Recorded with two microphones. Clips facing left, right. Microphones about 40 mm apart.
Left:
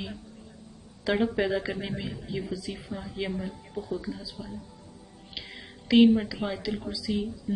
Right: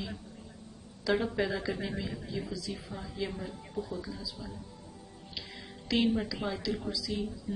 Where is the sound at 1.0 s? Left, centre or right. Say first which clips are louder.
Left 4 dB; left.